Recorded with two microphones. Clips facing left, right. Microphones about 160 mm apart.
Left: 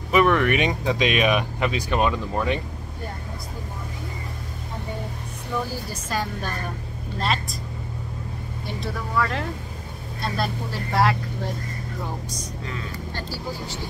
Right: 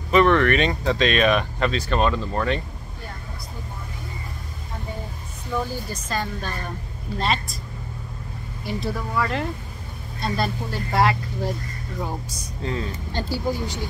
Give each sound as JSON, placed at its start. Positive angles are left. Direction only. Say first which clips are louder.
{"t": 0.1, "sound": "speech", "louder": "right 2 dB", "side_deg": 10}
{"t": 6.0, "sound": "speech", "louder": "left 1 dB", "side_deg": 10}
{"t": 8.6, "sound": "speech", "louder": "right 4 dB", "side_deg": 0}
{"t": 12.6, "sound": "speech", "louder": "right 8 dB", "side_deg": -30}
{"t": 13.1, "sound": "speech", "louder": "right 8 dB", "side_deg": -20}